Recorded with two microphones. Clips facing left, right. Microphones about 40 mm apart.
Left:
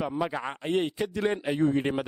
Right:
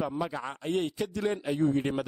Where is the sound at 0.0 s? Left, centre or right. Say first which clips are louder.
Left 2 dB; left.